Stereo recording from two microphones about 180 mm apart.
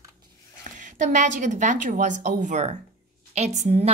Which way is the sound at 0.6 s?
45° right (ahead or behind).